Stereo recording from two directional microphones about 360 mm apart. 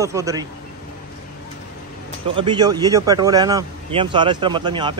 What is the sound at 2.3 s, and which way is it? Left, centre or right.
Speech, centre.